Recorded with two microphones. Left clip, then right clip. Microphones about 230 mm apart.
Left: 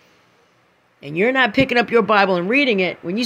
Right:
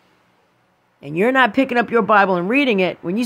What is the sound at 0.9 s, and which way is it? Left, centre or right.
Speech, centre.